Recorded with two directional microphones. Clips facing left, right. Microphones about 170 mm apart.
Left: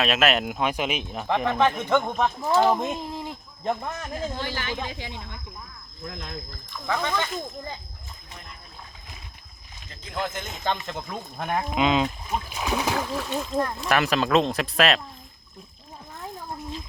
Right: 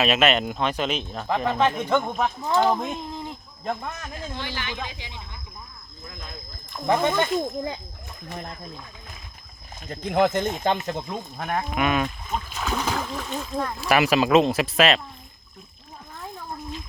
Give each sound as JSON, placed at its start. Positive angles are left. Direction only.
{"t": 0.0, "sound": "speech", "side_deg": 0}
{"t": 1.5, "sound": "speech", "side_deg": -10}
{"t": 4.2, "sound": "speech", "side_deg": 40}
{"t": 6.1, "sound": "speech", "side_deg": 70}
{"t": 6.7, "sound": "speech", "side_deg": -45}
{"t": 7.2, "sound": "speech", "side_deg": -60}
{"t": 9.9, "sound": "speech", "side_deg": -60}
{"t": 11.3, "sound": "speech", "side_deg": 0}
{"t": 11.8, "sound": "speech", "side_deg": 20}
{"t": 13.1, "sound": "speech", "side_deg": 0}